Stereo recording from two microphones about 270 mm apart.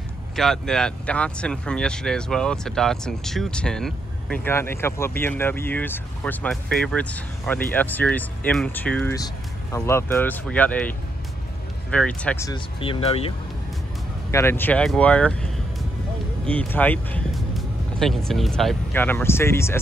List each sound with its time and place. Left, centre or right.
0.4 s speech: centre; by 13.3 s left
14.3 s speech: centre